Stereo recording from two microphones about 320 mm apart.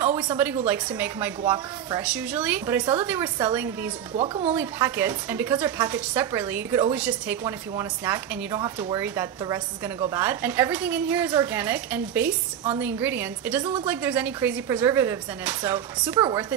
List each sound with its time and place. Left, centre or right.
0.0 s a woman's voice: centre
4.2 s speech: centre
4.6 s a woman's voice: centre